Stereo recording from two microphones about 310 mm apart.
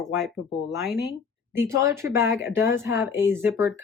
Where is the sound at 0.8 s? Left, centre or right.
Left.